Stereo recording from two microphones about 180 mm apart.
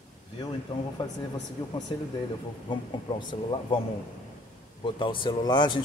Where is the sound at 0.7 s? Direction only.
30° left (ahead or behind).